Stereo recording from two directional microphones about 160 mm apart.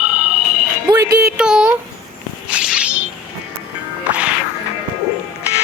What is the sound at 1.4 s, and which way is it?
Speech, 5° right (ahead or behind).